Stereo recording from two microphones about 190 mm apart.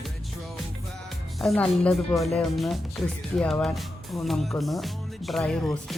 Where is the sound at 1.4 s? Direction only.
5° left (ahead or behind).